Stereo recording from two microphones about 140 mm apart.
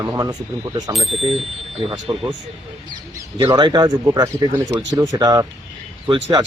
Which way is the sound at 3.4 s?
30° right (ahead or behind).